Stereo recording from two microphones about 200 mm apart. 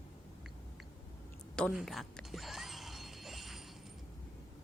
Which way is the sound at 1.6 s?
5° left (ahead or behind).